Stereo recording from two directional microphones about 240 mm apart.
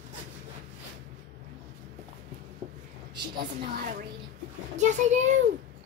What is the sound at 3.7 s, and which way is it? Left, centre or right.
A woman's voice, right.